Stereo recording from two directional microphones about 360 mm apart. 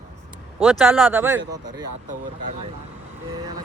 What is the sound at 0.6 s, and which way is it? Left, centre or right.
Speech, centre.